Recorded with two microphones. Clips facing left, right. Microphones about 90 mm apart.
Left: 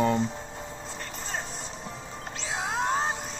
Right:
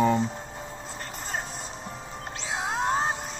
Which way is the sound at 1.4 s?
5° right (ahead or behind).